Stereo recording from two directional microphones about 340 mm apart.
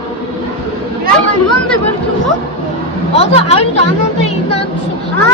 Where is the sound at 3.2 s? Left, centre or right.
Centre.